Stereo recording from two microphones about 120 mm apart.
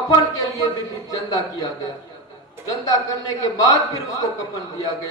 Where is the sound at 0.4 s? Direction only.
30° left (ahead or behind).